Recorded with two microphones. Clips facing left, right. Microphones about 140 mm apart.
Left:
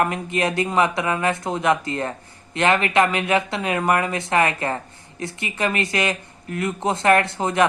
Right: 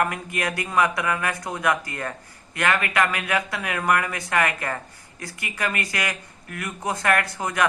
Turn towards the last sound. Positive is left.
turn(degrees=25)  # may be behind; listen again after turning